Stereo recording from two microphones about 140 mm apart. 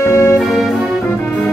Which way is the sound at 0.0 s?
20° left (ahead or behind).